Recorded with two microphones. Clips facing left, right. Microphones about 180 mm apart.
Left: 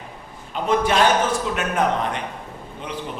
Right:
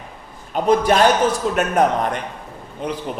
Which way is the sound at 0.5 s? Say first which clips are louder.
Right 4 dB; 40° right (ahead or behind).